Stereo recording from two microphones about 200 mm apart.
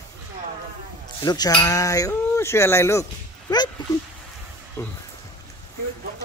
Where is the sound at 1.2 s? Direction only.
20° left (ahead or behind).